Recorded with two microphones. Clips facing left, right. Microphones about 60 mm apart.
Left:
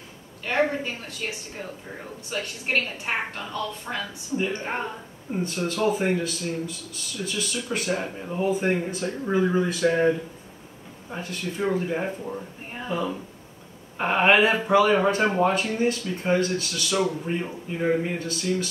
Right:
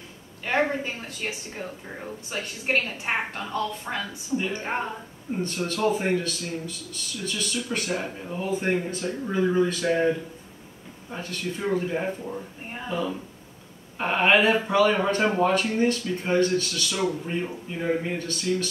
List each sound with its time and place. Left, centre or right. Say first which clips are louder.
0.5 s a woman's voice: even; centre
2.3 s a woman's voice: even; centre
4.3 s a woman's voice: even; centre
5.7 s speech: even; centre
8.9 s speech: left 2 dB; centre
11.2 s speech: left 2 dB; centre
11.7 s speech: even; centre